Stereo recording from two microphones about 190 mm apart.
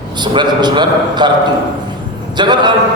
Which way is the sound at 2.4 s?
25° right (ahead or behind).